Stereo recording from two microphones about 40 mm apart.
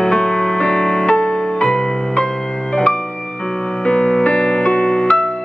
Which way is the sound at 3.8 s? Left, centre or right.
Left.